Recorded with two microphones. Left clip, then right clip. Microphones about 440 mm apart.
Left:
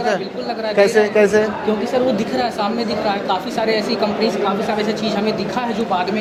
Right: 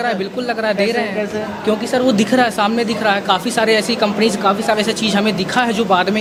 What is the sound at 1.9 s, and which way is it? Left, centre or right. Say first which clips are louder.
A woman's voice: right 5 dB; right.